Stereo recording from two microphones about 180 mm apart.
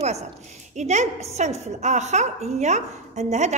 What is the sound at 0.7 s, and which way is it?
A woman's voice, 40° right (ahead or behind).